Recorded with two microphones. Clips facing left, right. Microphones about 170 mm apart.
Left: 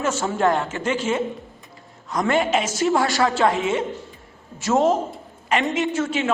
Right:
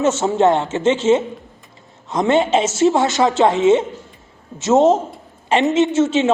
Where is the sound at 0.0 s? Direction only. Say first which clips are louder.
Right 6 dB; 25° right (ahead or behind).